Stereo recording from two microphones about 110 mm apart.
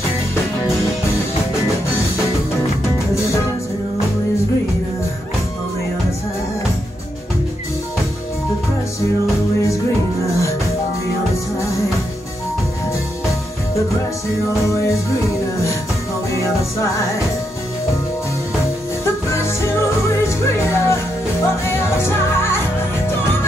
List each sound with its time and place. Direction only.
19.0 s music: 25° left (ahead or behind)